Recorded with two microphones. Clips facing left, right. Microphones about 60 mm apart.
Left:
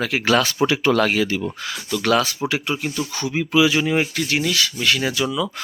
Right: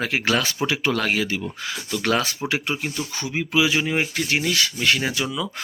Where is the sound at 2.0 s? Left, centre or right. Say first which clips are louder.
Left 4 dB; right.